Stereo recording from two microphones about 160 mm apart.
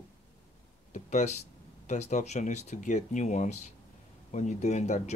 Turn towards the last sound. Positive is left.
turn(degrees=45)  # may be behind; listen again after turning